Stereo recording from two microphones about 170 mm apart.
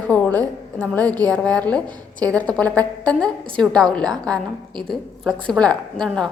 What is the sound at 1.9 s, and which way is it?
Speech, 25° right (ahead or behind).